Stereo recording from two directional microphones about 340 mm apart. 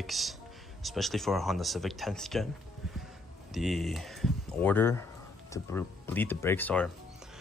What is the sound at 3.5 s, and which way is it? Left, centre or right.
Speech, centre.